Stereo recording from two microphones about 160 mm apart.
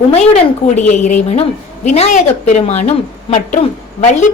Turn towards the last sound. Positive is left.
turn(degrees=45)  # may be behind; listen again after turning